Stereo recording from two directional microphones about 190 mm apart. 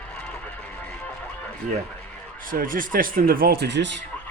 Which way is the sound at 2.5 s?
45° right (ahead or behind).